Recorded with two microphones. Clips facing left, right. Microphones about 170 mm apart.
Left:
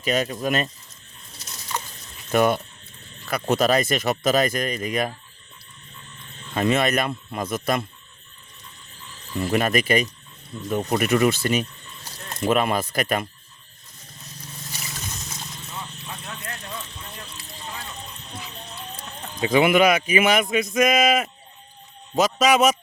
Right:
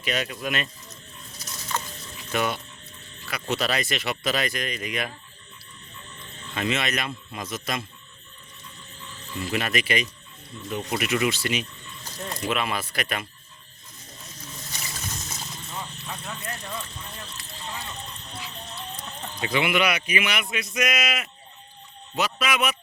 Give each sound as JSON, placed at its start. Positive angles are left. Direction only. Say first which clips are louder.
{"t": 0.0, "sound": "speech", "louder": "left 5 dB", "side_deg": 40}
{"t": 1.7, "sound": "a sound", "louder": "even", "side_deg": 15}
{"t": 2.3, "sound": "speech", "louder": "left 7 dB", "side_deg": 45}
{"t": 6.5, "sound": "speech", "louder": "left 6 dB", "side_deg": 45}
{"t": 9.4, "sound": "speech", "louder": "left 6 dB", "side_deg": 45}
{"t": 18.7, "sound": "music", "louder": "even", "side_deg": 0}
{"t": 19.5, "sound": "a man's voice", "louder": "left 7 dB", "side_deg": 45}